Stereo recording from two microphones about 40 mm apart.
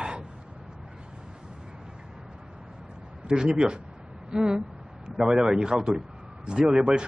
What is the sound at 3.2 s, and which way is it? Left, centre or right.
Speech, right.